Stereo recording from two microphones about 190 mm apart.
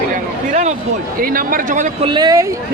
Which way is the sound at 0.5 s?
40° right (ahead or behind).